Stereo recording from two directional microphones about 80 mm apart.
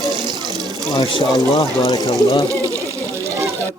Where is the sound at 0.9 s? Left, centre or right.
Left.